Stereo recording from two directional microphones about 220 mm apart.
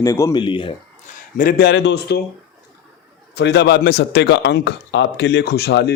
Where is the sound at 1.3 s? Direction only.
40° left (ahead or behind).